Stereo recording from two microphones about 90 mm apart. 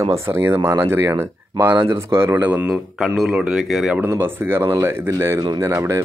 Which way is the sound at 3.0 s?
5° right (ahead or behind).